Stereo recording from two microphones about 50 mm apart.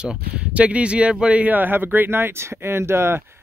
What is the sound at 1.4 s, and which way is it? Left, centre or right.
Speech, right.